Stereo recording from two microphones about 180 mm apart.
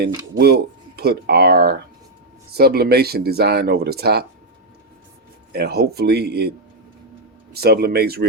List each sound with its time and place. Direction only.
0.3 s speech: 65° right (ahead or behind)
5.5 s speech: 65° right (ahead or behind)
7.5 s speech: 60° right (ahead or behind)